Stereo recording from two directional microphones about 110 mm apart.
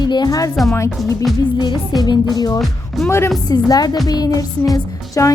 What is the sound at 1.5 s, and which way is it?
A woman's voice, 40° left (ahead or behind).